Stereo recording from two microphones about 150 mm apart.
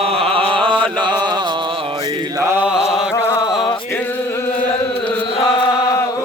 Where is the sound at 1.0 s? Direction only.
30° right (ahead or behind).